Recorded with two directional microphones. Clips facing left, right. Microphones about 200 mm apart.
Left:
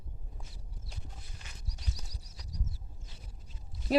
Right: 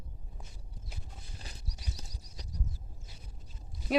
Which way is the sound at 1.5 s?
35° right (ahead or behind).